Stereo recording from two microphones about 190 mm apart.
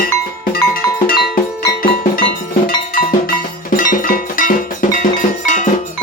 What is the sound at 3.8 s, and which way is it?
Music, 45° left (ahead or behind).